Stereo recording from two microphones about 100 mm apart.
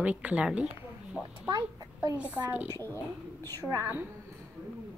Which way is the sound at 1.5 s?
40° right (ahead or behind).